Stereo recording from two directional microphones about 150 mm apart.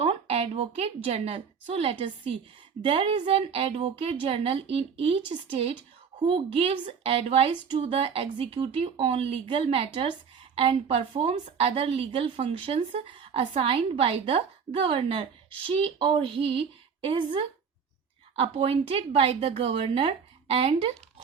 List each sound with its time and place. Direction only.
0.0 s a woman's voice: 40° right (ahead or behind)